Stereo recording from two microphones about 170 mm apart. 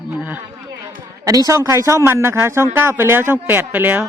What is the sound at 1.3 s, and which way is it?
Speech, 20° right (ahead or behind).